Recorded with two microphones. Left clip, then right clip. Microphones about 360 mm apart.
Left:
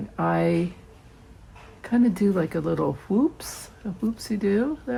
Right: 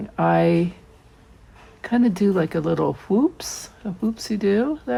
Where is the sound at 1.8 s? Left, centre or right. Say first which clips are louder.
Right 2 dB; centre.